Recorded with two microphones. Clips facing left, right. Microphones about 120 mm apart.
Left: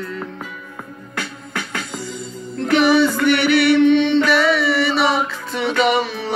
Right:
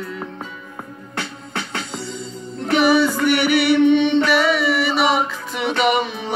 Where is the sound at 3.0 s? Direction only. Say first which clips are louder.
Left 1 dB; 10° right (ahead or behind).